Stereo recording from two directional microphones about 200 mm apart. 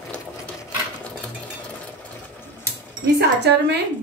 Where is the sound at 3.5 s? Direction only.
55° right (ahead or behind).